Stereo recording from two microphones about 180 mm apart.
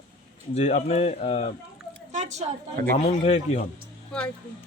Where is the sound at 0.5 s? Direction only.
35° left (ahead or behind).